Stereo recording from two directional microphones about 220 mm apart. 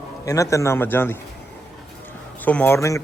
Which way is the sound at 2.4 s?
5° left (ahead or behind).